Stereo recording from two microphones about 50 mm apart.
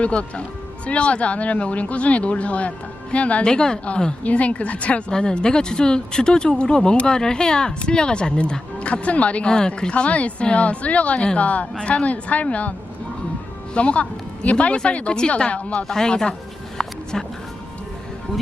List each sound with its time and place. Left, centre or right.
0.0 s speech: left
3.4 s speech: centre
13.7 s speech: left
15.8 s speech: centre
16.7 s a sound: centre